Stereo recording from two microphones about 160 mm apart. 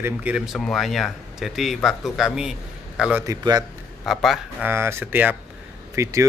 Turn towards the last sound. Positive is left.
turn(degrees=-20)  # may be behind; listen again after turning